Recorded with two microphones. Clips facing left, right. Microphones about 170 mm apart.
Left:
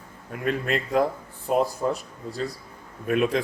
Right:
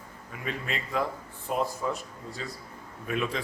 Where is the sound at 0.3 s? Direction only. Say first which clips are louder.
Left 9 dB; 55° left (ahead or behind).